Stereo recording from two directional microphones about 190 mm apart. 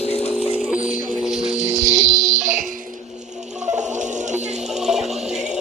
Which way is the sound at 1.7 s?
15° right (ahead or behind).